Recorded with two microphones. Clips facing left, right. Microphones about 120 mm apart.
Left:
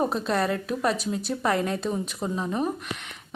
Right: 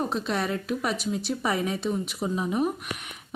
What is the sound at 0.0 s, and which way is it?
A woman's voice, centre (ahead or behind).